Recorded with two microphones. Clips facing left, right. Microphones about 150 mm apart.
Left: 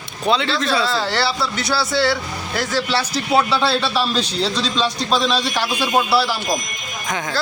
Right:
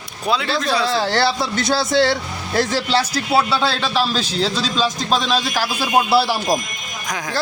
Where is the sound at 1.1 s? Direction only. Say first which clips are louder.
Right 2 dB; 50° right (ahead or behind).